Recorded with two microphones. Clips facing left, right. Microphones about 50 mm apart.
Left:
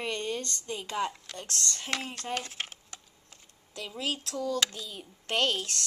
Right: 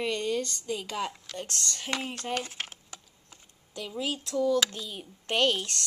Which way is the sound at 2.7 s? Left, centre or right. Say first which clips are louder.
Right 1 dB; centre.